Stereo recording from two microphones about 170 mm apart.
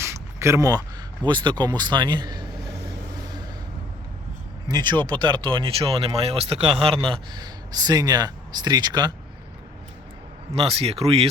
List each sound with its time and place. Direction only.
0.0 s speech: 15° right (ahead or behind)
4.7 s speech: 25° right (ahead or behind)
10.5 s speech: 35° right (ahead or behind)